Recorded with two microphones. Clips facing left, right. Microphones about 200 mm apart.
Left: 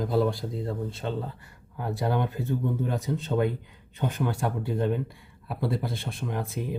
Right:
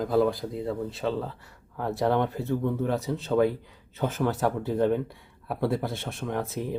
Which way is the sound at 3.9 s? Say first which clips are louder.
Right 2 dB; 75° right (ahead or behind).